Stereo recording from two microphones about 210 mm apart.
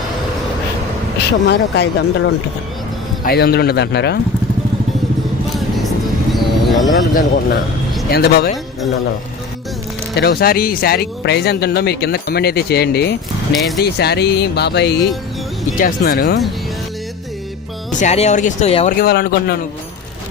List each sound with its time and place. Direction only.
1.5 s speech: 55° left (ahead or behind)
6.3 s vehicle: centre (ahead or behind)
6.8 s speech: 40° left (ahead or behind)
10.2 s speech: 50° left (ahead or behind)
13.5 s speech: centre (ahead or behind)
13.8 s speech: 50° left (ahead or behind)
18.0 s speech: 35° left (ahead or behind)
18.9 s speech: 45° left (ahead or behind)